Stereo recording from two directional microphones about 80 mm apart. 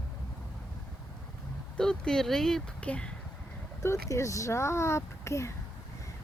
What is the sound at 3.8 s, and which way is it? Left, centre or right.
Speech, left.